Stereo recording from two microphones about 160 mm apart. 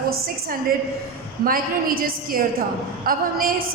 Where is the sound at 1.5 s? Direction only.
65° right (ahead or behind).